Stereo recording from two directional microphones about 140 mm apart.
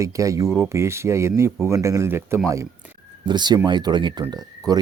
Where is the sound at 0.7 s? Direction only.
20° right (ahead or behind).